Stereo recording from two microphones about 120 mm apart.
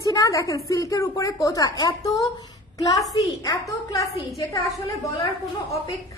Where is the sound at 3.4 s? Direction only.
30° left (ahead or behind).